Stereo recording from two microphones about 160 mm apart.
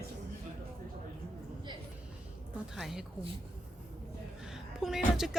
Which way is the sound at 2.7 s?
Centre (ahead or behind).